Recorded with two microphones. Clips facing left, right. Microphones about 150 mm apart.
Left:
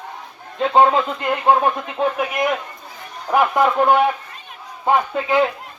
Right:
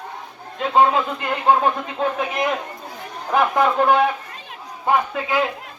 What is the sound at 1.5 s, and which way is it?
Speech, 15° left (ahead or behind).